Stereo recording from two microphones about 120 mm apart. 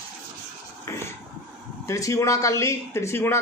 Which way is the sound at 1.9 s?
25° left (ahead or behind).